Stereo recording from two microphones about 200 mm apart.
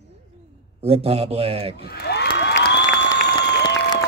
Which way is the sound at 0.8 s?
30° right (ahead or behind).